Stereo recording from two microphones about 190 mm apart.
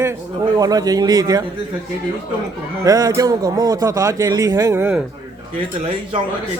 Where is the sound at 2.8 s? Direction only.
20° right (ahead or behind).